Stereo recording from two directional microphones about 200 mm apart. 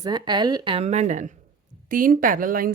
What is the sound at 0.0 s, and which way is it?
A woman's voice, 20° right (ahead or behind).